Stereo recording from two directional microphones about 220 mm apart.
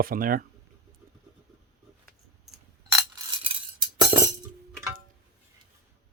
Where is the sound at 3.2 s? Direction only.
20° right (ahead or behind).